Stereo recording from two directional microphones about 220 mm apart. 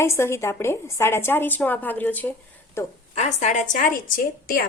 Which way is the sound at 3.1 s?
30° left (ahead or behind).